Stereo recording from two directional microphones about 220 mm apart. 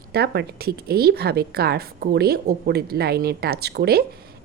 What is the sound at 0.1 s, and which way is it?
A woman's voice, 45° right (ahead or behind).